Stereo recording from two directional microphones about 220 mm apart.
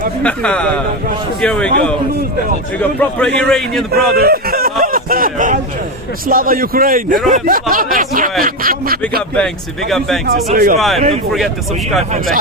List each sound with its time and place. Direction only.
0.2 s a man's voice: 5° left (ahead or behind)
2.7 s a man's voice: 5° left (ahead or behind)
4.1 s a sound: 45° right (ahead or behind)
6.2 s speech: 40° right (ahead or behind)
10.2 s speech: 45° right (ahead or behind)
10.8 s a man's voice: centre (ahead or behind)